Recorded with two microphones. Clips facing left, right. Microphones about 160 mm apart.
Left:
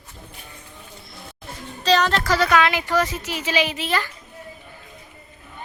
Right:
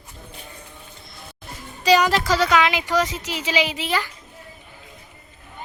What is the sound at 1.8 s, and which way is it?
Speech, 10° right (ahead or behind).